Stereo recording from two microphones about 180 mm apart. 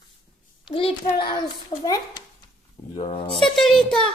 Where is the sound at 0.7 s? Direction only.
30° left (ahead or behind).